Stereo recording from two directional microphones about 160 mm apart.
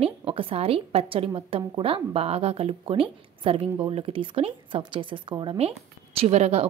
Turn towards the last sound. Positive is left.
turn(degrees=-40)  # may be behind; listen again after turning